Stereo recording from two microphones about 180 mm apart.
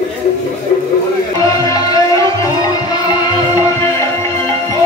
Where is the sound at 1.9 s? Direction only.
20° left (ahead or behind).